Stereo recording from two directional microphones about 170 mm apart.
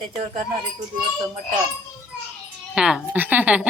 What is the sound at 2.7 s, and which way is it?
Speech, 5° right (ahead or behind).